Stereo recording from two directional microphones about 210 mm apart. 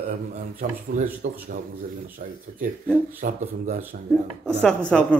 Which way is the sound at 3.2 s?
40° right (ahead or behind).